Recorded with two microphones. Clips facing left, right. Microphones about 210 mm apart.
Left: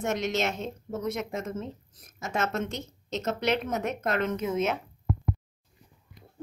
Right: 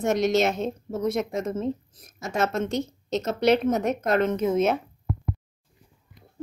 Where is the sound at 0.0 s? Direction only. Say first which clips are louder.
Right 7 dB; 40° right (ahead or behind).